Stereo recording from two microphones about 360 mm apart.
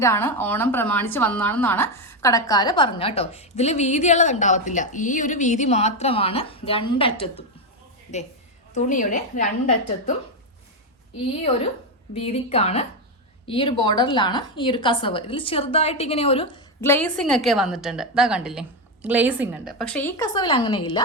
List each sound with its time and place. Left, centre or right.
0.0 s a woman's voice: centre
8.7 s a woman's voice: left
12.1 s a woman's voice: centre